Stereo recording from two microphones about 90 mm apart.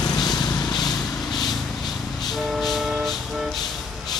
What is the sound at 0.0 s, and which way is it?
Vehicle, 50° left (ahead or behind).